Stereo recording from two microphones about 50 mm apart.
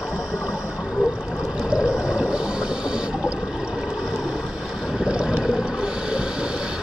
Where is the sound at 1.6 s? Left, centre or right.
Centre.